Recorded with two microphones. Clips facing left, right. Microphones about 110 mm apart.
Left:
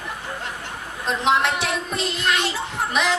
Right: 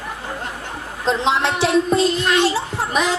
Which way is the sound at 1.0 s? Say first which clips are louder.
Right 2 dB; 25° right (ahead or behind).